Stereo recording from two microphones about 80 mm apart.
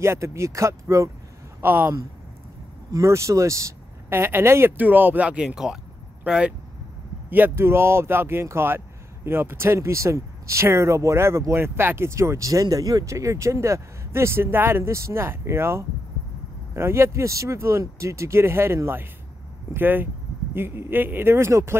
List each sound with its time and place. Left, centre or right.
0.0 s speech: right
1.6 s speech: right
2.9 s speech: right; by 6.5 s centre
7.2 s speech: right